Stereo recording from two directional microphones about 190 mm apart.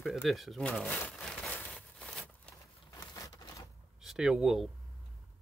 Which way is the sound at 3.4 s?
20° left (ahead or behind).